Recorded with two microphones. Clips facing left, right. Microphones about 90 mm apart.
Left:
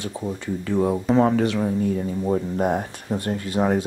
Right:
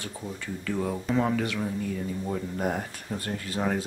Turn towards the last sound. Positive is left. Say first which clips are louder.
# left 7 dB
turn(degrees=20)  # may be behind; listen again after turning